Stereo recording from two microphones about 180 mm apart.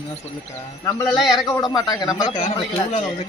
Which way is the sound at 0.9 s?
15° left (ahead or behind).